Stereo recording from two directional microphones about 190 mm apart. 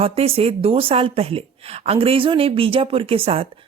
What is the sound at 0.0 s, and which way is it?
A woman's voice, 30° right (ahead or behind).